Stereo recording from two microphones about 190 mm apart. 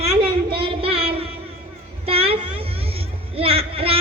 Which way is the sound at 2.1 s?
30° right (ahead or behind).